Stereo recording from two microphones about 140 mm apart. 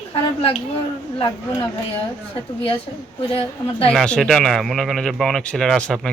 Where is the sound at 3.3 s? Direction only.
45° left (ahead or behind).